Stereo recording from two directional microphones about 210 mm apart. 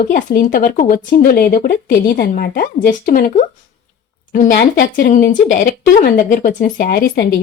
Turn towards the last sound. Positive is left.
turn(degrees=45)  # may be behind; listen again after turning